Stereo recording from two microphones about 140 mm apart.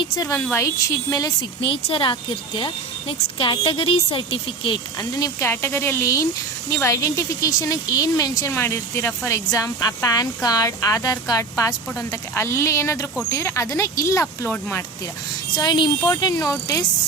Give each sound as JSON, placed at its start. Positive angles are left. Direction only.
{"t": 0.0, "sound": "speech", "side_deg": 25}
{"t": 1.6, "sound": "a woman's voice", "side_deg": 40}
{"t": 15.5, "sound": "speech", "side_deg": 30}